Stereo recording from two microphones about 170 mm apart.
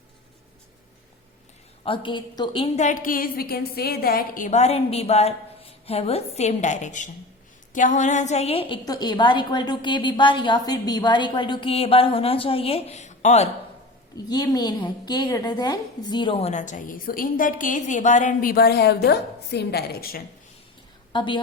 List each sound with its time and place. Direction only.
1.8 s a woman's voice: 30° left (ahead or behind)
2.7 s a woman's voice: 45° left (ahead or behind)
14.3 s a woman's voice: 25° left (ahead or behind); by 20.2 s 65° left (ahead or behind)
21.1 s a woman's voice: 30° left (ahead or behind)